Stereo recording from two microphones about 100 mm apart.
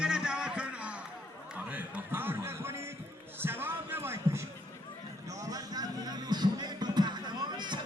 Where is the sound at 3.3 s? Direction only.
20° right (ahead or behind).